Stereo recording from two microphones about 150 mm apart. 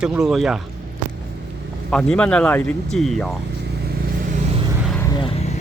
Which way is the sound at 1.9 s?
5° left (ahead or behind).